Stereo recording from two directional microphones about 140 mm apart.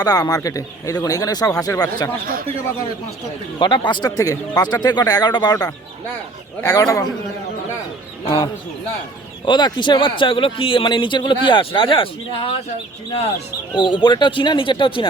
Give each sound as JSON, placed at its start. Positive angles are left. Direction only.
{"t": 0.0, "sound": "speech", "side_deg": 25}
{"t": 3.6, "sound": "speech", "side_deg": 35}
{"t": 9.5, "sound": "speech", "side_deg": 30}
{"t": 13.7, "sound": "speech", "side_deg": 35}